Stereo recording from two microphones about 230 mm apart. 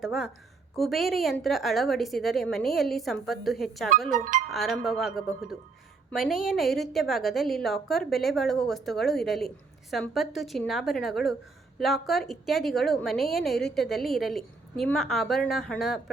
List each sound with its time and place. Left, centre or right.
0.0 s a woman's voice: centre
4.1 s speech: right
4.4 s a woman's voice: centre